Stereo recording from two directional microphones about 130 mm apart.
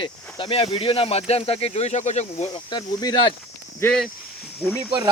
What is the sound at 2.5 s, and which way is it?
Speech, 35° left (ahead or behind).